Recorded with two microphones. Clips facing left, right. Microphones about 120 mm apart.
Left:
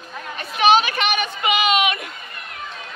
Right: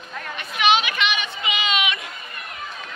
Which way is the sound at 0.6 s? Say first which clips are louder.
Left 4 dB; 40° left (ahead or behind).